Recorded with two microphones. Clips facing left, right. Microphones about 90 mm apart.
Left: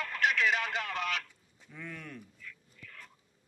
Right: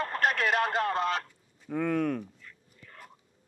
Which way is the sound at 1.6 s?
75° right (ahead or behind).